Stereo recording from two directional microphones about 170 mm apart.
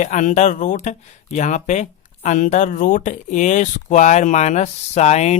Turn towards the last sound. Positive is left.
turn(degrees=40)  # may be behind; listen again after turning